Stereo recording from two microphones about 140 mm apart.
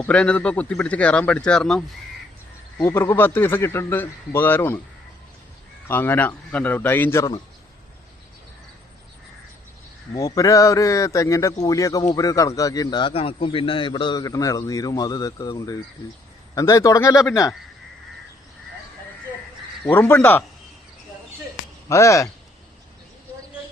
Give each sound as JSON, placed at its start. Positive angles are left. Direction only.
{"t": 0.1, "sound": "speech", "side_deg": 10}
{"t": 2.7, "sound": "speech", "side_deg": 20}
{"t": 5.9, "sound": "speech", "side_deg": 15}
{"t": 10.2, "sound": "a man's voice", "side_deg": 25}
{"t": 19.8, "sound": "speech", "side_deg": 15}
{"t": 21.8, "sound": "a man's voice", "side_deg": 20}